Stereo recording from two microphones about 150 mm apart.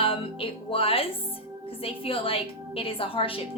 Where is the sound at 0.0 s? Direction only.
35° left (ahead or behind).